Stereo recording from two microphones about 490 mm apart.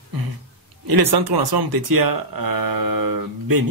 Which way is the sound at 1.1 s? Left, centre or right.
Right.